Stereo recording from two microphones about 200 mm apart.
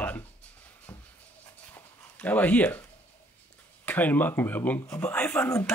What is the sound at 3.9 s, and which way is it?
Speech, 10° left (ahead or behind).